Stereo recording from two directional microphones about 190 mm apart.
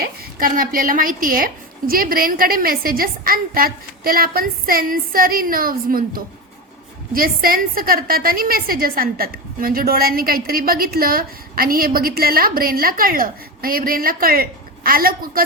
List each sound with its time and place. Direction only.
0.3 s a woman's voice: 50° right (ahead or behind)